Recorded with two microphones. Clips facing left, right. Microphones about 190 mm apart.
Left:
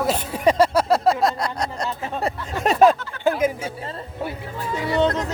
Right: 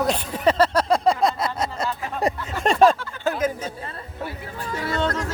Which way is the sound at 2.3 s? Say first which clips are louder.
Right 5 dB; 15° right (ahead or behind).